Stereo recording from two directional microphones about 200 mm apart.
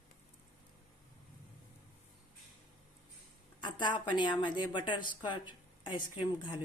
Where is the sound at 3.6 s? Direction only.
25° left (ahead or behind).